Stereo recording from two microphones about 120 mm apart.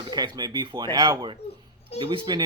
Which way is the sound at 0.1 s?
35° right (ahead or behind).